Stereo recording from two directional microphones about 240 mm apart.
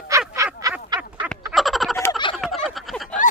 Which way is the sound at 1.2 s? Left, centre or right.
Centre.